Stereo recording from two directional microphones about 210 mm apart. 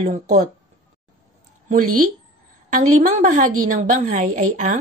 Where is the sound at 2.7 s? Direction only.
35° right (ahead or behind).